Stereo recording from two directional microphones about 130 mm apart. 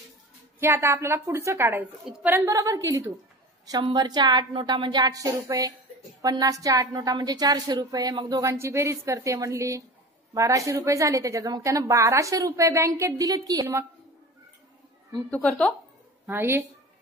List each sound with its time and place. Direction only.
0.6 s a woman's voice: 20° right (ahead or behind)
15.2 s speech: 10° left (ahead or behind)
16.3 s a woman's voice: 15° right (ahead or behind)